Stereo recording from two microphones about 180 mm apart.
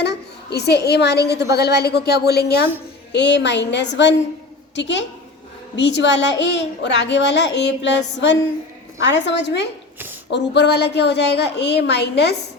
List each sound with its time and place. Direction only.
0.0 s a child's voice: 65° left (ahead or behind)
3.1 s a woman's voice: 75° left (ahead or behind)